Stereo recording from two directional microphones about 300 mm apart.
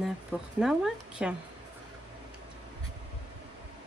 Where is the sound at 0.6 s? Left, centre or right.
Centre.